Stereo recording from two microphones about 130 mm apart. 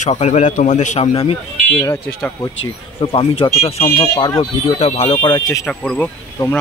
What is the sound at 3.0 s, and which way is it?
Speech, 45° left (ahead or behind).